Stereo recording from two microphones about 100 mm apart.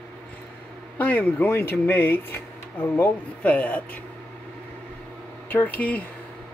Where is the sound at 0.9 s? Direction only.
15° left (ahead or behind).